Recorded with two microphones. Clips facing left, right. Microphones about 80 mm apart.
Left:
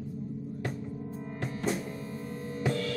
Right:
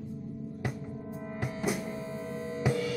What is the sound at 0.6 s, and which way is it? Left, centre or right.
Music, centre.